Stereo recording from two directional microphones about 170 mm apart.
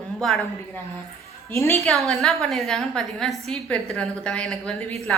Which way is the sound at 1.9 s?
Centre (ahead or behind).